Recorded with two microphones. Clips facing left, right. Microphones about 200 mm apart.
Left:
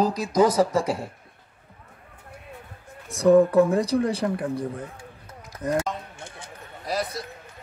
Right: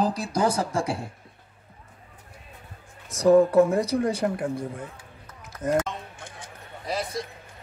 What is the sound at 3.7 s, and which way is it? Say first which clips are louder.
Speech: left 1 dB; 35° left (ahead or behind).